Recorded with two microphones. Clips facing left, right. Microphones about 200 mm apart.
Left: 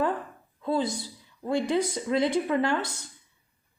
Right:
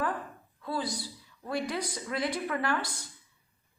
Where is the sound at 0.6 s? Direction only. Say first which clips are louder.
Left 7 dB; 25° left (ahead or behind).